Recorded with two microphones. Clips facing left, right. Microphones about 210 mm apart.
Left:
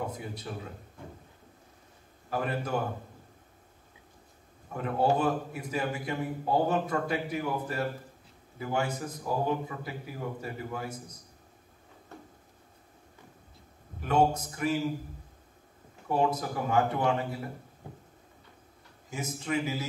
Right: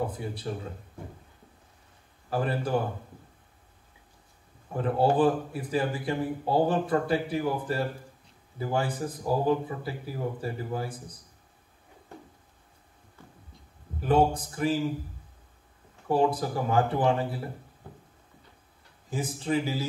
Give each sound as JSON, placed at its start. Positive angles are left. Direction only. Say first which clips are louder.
{"t": 0.0, "sound": "a man's voice", "louder": "right 4 dB", "side_deg": -30}
{"t": 2.3, "sound": "a man's voice", "louder": "right 3 dB", "side_deg": -30}
{"t": 4.7, "sound": "a man's voice", "louder": "right 3 dB", "side_deg": -30}
{"t": 14.0, "sound": "a man's voice", "louder": "right 2 dB", "side_deg": -30}
{"t": 16.1, "sound": "a man's voice", "louder": "right 3 dB", "side_deg": -30}
{"t": 19.0, "sound": "a man's voice", "louder": "right 4 dB", "side_deg": -30}